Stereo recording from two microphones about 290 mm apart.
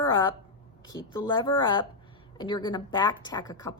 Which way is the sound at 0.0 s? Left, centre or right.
Centre.